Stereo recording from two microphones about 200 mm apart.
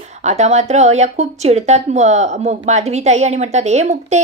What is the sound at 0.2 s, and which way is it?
Speech, 35° right (ahead or behind).